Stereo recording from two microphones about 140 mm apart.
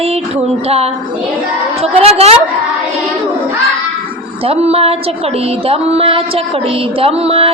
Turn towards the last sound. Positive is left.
turn(degrees=-45)  # may be behind; listen again after turning